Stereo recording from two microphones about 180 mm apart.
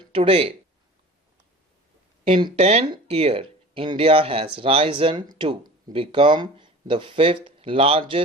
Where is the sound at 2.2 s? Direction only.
30° right (ahead or behind).